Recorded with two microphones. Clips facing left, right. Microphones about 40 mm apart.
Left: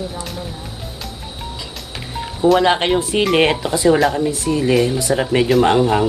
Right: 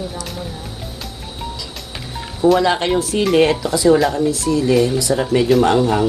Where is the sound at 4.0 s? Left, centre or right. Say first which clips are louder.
Even; centre.